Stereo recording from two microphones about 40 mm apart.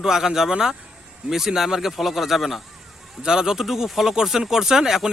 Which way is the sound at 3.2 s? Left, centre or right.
Centre.